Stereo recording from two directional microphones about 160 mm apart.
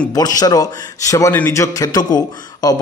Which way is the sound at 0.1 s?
25° left (ahead or behind).